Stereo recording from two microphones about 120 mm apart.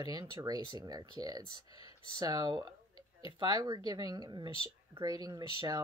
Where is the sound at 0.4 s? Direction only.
35° right (ahead or behind).